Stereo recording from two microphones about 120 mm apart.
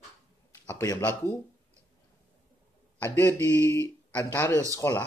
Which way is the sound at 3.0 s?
20° left (ahead or behind).